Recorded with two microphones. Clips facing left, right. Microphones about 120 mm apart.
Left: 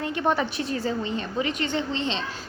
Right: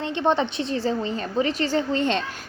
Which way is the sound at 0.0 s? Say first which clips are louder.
Right 2 dB; 25° right (ahead or behind).